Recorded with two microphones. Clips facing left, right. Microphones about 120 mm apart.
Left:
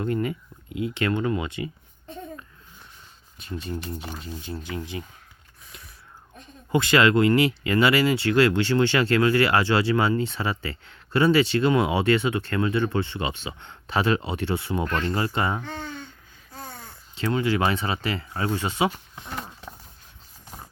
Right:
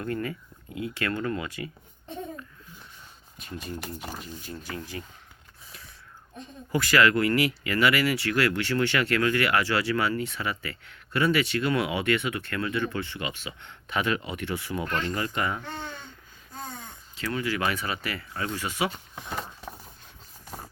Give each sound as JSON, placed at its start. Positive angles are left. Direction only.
{"t": 0.0, "sound": "speech", "side_deg": 20}
{"t": 3.3, "sound": "speech", "side_deg": 30}
{"t": 6.7, "sound": "speech", "side_deg": 25}
{"t": 17.2, "sound": "speech", "side_deg": 25}